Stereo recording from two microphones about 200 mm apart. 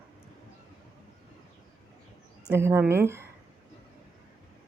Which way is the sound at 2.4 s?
10° right (ahead or behind).